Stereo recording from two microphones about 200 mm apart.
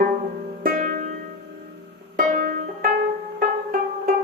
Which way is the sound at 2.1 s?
40° right (ahead or behind).